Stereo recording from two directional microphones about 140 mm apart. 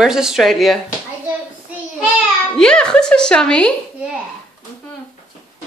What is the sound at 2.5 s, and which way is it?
Speech, 5° left (ahead or behind).